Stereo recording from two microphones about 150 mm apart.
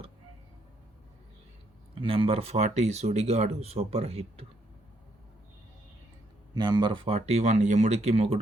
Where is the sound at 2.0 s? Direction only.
40° right (ahead or behind).